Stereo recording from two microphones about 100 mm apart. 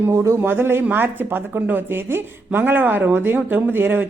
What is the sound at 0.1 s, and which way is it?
Speech, 30° right (ahead or behind).